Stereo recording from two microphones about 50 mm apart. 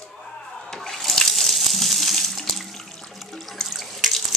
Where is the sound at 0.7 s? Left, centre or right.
Centre.